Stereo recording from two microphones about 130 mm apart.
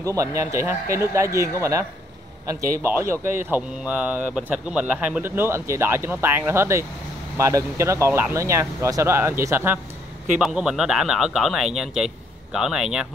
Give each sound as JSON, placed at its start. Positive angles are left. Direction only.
{"t": 0.0, "sound": "speech", "side_deg": -25}
{"t": 2.8, "sound": "speech", "side_deg": -15}
{"t": 10.4, "sound": "speech", "side_deg": -5}